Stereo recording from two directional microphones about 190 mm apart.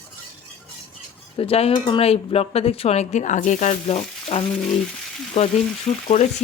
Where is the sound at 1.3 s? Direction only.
30° left (ahead or behind).